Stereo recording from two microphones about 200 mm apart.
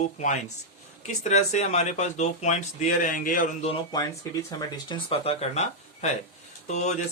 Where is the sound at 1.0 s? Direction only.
35° left (ahead or behind).